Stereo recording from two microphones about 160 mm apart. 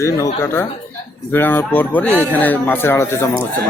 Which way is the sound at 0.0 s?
15° left (ahead or behind).